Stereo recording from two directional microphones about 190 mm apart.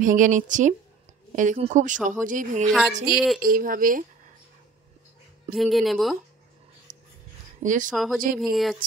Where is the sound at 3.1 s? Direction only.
55° right (ahead or behind).